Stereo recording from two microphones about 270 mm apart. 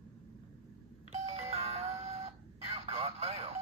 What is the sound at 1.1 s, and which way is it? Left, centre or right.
Doorbell, right.